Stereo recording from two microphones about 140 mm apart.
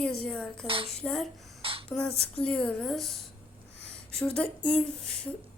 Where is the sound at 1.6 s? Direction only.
40° right (ahead or behind).